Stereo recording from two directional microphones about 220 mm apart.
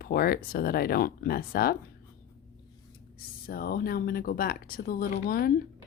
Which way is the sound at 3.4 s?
45° left (ahead or behind).